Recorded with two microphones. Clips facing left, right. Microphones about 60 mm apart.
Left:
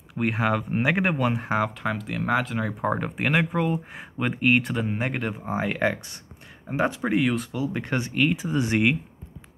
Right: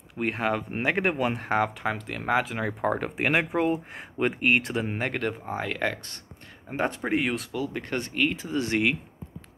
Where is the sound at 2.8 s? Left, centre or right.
Centre.